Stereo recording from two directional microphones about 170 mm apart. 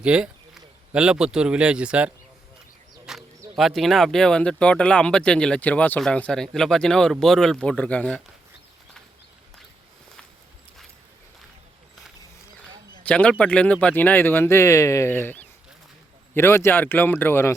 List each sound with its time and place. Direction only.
0.0 s speech: 5° right (ahead or behind)
13.0 s a man's voice: 5° left (ahead or behind)